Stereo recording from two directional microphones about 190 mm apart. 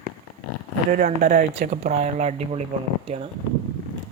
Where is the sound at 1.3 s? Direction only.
50° right (ahead or behind).